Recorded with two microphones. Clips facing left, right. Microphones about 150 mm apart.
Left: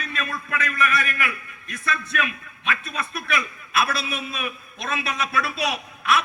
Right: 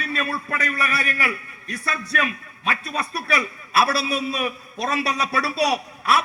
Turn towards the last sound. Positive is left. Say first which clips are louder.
# right 2 dB
turn(degrees=-35)  # may be behind; listen again after turning